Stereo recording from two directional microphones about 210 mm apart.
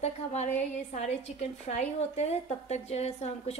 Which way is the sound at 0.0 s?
35° left (ahead or behind).